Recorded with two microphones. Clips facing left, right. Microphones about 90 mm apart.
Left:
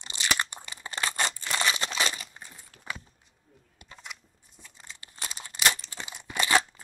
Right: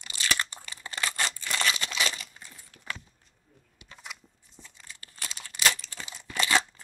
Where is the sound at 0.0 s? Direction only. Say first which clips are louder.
Left 1 dB; 20° left (ahead or behind).